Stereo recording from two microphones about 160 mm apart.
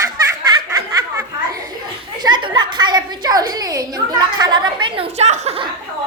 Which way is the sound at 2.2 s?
25° right (ahead or behind).